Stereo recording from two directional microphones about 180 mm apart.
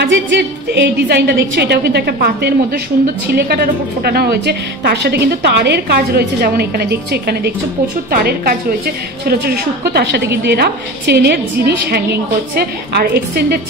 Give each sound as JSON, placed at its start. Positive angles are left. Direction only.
{"t": 0.0, "sound": "a woman's voice", "side_deg": -80}